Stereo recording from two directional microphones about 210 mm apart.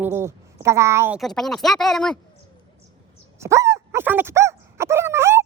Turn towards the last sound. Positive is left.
turn(degrees=-10)  # may be behind; listen again after turning